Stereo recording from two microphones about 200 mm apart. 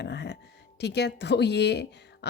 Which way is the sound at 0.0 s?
55° left (ahead or behind).